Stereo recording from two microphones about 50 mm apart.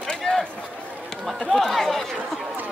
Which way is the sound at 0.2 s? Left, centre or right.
Centre.